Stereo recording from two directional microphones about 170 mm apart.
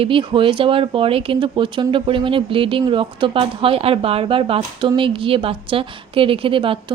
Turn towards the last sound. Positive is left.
turn(degrees=-30)  # may be behind; listen again after turning